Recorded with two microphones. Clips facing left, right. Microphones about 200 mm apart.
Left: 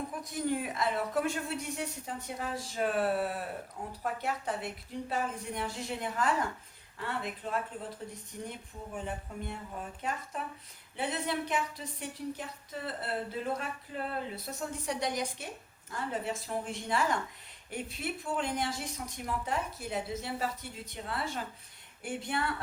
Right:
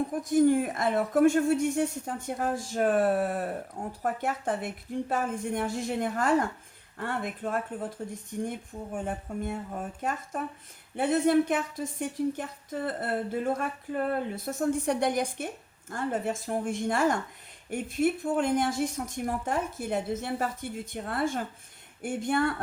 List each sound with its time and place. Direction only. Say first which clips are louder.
0.1 s speech: right 14 dB; 45° right (ahead or behind)